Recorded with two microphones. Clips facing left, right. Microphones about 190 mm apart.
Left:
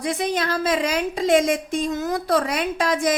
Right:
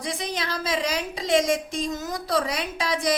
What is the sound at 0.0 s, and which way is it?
A woman's voice, 55° left (ahead or behind).